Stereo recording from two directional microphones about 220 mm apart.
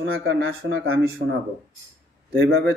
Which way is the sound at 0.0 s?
60° right (ahead or behind).